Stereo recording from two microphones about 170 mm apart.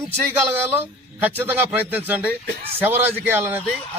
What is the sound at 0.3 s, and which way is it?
Speech, 10° right (ahead or behind).